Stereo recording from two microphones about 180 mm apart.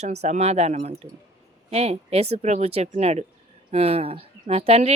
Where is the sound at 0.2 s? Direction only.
35° right (ahead or behind).